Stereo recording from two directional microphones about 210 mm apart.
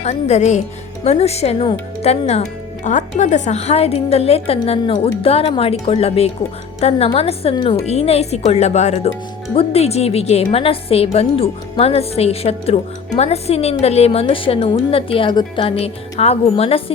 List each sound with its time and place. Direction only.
0.0 s a woman's voice: 30° left (ahead or behind)